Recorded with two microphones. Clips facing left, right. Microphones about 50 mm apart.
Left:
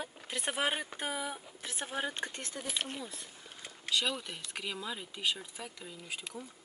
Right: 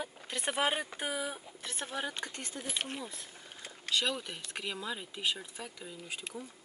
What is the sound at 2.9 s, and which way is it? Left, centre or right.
Speech, centre.